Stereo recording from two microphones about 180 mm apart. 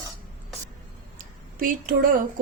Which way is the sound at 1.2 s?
50° right (ahead or behind).